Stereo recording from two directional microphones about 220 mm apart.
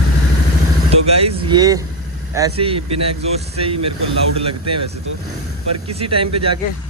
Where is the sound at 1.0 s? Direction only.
25° right (ahead or behind).